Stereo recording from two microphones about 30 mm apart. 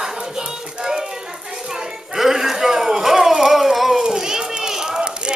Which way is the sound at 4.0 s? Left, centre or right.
Right.